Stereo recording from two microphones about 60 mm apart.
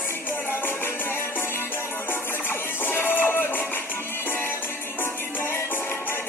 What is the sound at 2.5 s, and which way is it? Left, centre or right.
Music, left.